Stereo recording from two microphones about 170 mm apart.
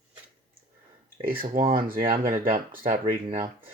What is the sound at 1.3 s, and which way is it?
Speech, 55° right (ahead or behind).